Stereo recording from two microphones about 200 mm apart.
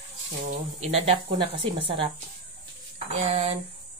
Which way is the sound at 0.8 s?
30° right (ahead or behind).